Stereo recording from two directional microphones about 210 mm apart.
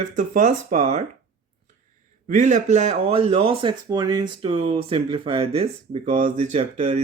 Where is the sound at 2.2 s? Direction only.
35° right (ahead or behind).